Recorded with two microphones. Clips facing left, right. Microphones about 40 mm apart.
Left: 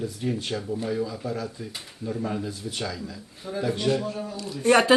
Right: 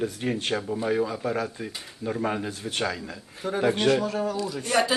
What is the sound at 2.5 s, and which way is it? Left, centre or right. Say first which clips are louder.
Speech: right 3 dB; right.